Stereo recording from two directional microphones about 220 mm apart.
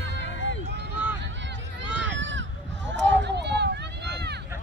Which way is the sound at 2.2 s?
55° right (ahead or behind).